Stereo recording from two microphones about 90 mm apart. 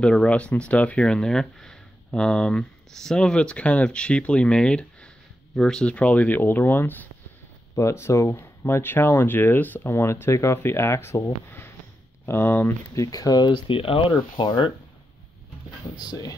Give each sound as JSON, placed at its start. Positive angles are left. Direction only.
{"t": 0.0, "sound": "speech", "side_deg": 10}
{"t": 12.9, "sound": "speech", "side_deg": 40}
{"t": 13.7, "sound": "speech", "side_deg": 85}
{"t": 16.0, "sound": "speech", "side_deg": 45}